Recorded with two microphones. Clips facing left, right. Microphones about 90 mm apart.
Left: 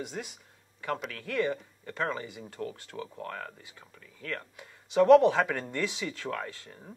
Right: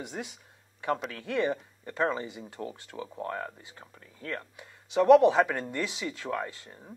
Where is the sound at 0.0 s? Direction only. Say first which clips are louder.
Even; 20° right (ahead or behind).